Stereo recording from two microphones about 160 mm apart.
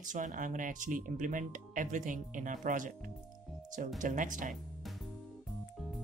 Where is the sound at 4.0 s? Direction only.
55° right (ahead or behind).